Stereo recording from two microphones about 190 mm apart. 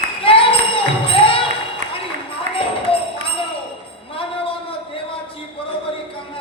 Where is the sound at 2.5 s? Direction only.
30° left (ahead or behind).